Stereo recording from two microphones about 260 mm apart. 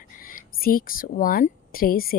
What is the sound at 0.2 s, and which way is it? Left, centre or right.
Speech, left.